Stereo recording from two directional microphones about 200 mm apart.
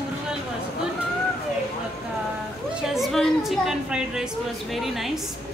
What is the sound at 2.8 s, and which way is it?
A woman's voice, centre (ahead or behind).